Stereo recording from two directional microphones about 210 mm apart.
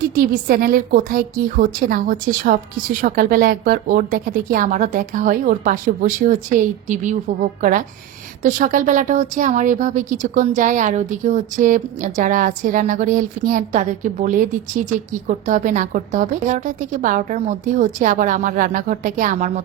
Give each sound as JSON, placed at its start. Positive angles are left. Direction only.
{"t": 0.1, "sound": "a woman's voice", "side_deg": -40}